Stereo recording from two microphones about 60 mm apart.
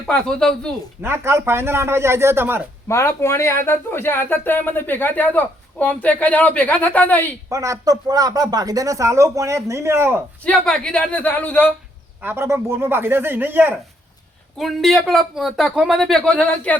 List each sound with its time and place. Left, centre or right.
0.1 s a man's voice: centre
1.0 s speech: right
2.9 s speech: left
7.5 s speech: right
10.4 s speech: centre
12.2 s speech: right
14.6 s a man's voice: centre